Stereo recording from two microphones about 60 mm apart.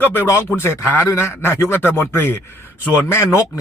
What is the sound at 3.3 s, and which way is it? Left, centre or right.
Speech, left.